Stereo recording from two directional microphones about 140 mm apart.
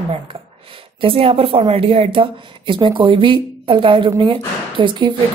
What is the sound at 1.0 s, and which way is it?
A woman's voice, 40° right (ahead or behind).